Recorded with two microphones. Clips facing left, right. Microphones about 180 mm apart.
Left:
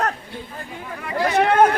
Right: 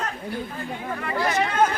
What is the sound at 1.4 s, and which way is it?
Speech, 60° left (ahead or behind).